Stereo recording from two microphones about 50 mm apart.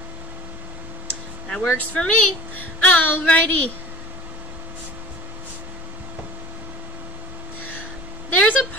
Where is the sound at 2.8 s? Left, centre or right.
Left.